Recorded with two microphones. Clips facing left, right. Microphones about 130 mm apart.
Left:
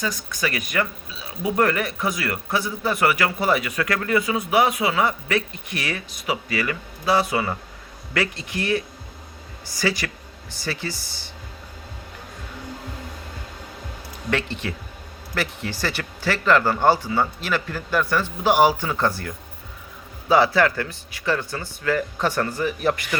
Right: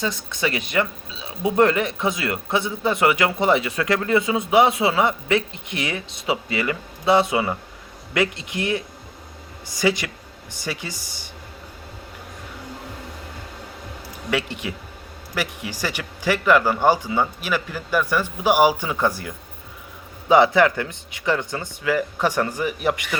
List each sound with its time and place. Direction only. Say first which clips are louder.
0.0 s speech: right 2 dB; 25° right (ahead or behind)
14.3 s speech: even; 10° right (ahead or behind)